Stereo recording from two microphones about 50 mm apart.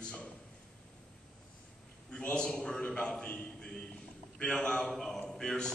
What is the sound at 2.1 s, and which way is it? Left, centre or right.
A man's voice, centre.